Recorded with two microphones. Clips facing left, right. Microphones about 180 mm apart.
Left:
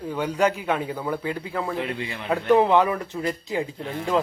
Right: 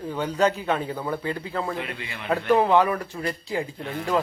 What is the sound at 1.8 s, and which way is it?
Speech, 30° left (ahead or behind).